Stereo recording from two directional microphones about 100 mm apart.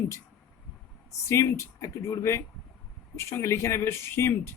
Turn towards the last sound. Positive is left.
turn(degrees=25)  # may be behind; listen again after turning